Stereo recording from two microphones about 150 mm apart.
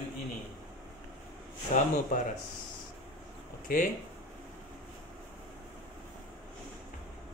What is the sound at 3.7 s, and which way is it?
Speech, 70° left (ahead or behind).